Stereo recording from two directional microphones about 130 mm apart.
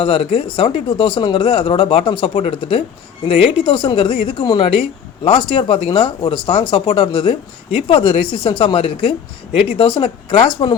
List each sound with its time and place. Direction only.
0.0 s speech: 45° left (ahead or behind)